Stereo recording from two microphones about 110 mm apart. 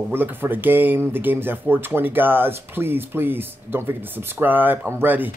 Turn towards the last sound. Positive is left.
turn(degrees=-15)  # may be behind; listen again after turning